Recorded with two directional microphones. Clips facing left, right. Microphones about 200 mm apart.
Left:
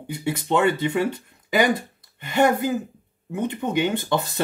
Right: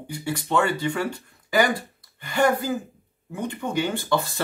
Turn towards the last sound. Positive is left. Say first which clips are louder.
# left 1 dB
turn(degrees=20)  # may be behind; listen again after turning